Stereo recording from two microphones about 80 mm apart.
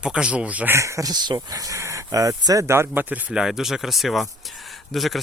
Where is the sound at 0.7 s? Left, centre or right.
Right.